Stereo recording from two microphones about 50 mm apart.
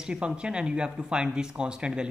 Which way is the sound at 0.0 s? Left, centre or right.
Centre.